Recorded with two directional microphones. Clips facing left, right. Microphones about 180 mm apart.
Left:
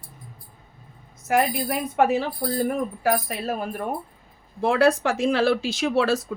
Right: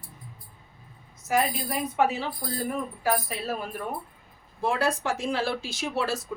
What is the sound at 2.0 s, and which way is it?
Speech, 60° left (ahead or behind).